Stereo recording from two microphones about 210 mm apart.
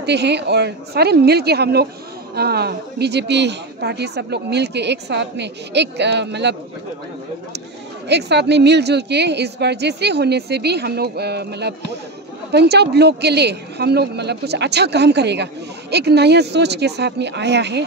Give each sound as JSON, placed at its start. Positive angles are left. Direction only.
{"t": 0.0, "sound": "a woman's voice", "side_deg": -55}
{"t": 8.1, "sound": "a woman's voice", "side_deg": -55}